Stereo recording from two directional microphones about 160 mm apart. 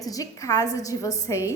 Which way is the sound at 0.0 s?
20° left (ahead or behind).